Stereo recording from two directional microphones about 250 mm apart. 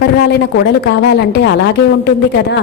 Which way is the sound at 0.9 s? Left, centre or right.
Left.